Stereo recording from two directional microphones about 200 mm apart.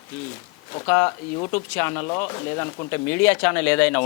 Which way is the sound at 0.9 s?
20° left (ahead or behind).